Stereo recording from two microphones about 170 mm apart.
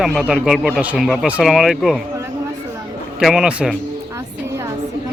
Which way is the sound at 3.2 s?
Centre (ahead or behind).